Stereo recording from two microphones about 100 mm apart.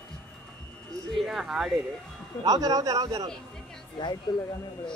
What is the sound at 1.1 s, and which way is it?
Speech, centre (ahead or behind).